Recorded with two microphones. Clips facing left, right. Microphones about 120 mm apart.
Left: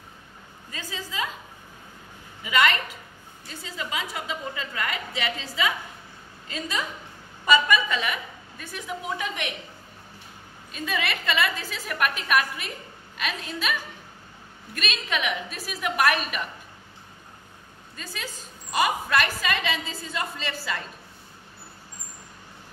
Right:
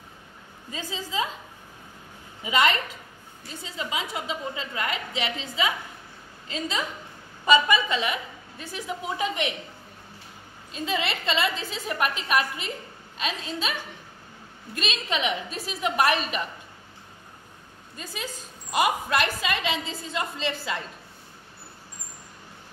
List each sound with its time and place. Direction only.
0.7 s a woman's voice: 20° right (ahead or behind)
2.4 s a woman's voice: 25° right (ahead or behind)
7.4 s a woman's voice: 20° right (ahead or behind)
10.7 s a woman's voice: 25° right (ahead or behind)
14.8 s a woman's voice: 30° right (ahead or behind)
17.9 s a woman's voice: 15° right (ahead or behind)